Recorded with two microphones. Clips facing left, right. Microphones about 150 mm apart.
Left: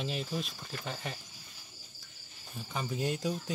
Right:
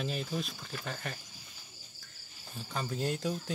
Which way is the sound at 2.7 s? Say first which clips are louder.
Even; 5° left (ahead or behind).